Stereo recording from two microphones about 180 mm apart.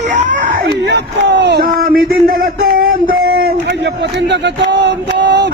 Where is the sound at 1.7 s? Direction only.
55° right (ahead or behind).